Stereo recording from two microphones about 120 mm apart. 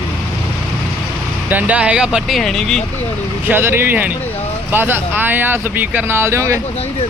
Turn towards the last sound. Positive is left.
turn(degrees=-25)  # may be behind; listen again after turning